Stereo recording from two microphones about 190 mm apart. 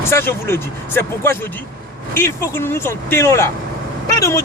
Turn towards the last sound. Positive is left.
turn(degrees=15)  # may be behind; listen again after turning